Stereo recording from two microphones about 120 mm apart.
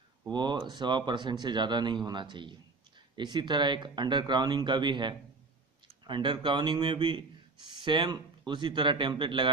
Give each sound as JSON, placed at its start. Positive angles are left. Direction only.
{"t": 0.3, "sound": "a man's voice", "side_deg": -40}